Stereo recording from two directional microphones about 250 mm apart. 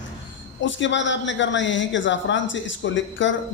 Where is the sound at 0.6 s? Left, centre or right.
Left.